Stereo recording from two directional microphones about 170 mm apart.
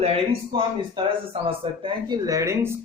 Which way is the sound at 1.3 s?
30° right (ahead or behind).